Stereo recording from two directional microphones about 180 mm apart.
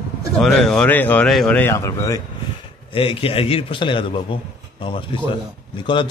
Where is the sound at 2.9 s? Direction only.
30° left (ahead or behind).